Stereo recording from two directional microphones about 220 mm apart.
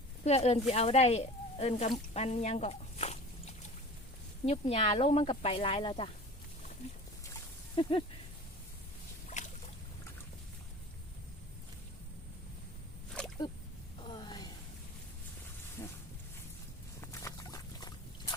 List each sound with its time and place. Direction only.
0.3 s speech: 30° left (ahead or behind)
2.1 s squish: 30° left (ahead or behind)
4.4 s speech: 25° left (ahead or behind)
7.8 s speech: 25° left (ahead or behind)
9.2 s boat: 35° left (ahead or behind)
14.1 s a sound: 20° left (ahead or behind)
15.8 s a sound: 10° left (ahead or behind)
17.0 s pig: 15° left (ahead or behind)